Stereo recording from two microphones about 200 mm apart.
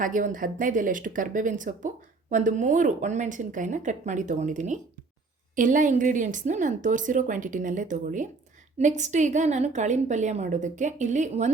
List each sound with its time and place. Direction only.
0.0 s a woman's voice: 40° right (ahead or behind)